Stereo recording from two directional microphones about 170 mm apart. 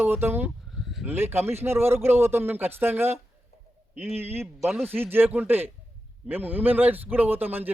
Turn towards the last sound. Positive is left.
turn(degrees=-10)  # may be behind; listen again after turning